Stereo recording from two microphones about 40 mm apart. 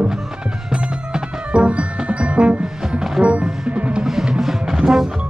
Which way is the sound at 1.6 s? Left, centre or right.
Right.